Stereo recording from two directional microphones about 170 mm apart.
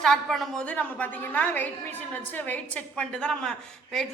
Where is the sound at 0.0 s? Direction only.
Centre (ahead or behind).